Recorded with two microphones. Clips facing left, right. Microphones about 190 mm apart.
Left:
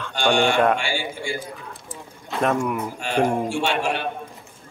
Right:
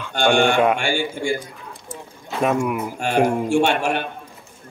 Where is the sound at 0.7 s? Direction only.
50° right (ahead or behind).